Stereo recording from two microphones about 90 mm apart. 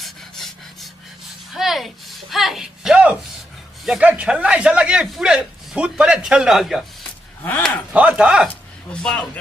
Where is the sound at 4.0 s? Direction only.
15° right (ahead or behind).